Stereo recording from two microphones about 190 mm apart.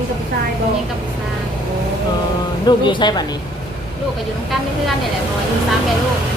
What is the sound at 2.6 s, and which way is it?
Speech, 25° left (ahead or behind).